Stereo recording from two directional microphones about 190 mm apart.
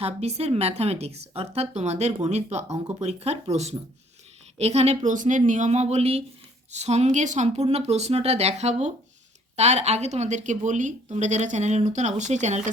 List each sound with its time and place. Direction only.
0.0 s a woman's voice: 35° right (ahead or behind)
2.6 s speech: 15° right (ahead or behind)
3.0 s a woman's voice: 35° right (ahead or behind)